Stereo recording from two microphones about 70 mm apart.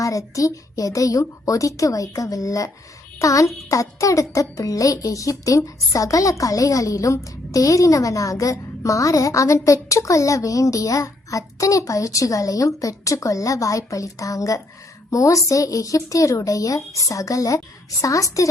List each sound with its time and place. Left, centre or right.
0.0 s a child's voice: left